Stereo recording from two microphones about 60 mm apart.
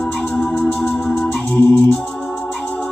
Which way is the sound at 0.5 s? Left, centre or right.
Left.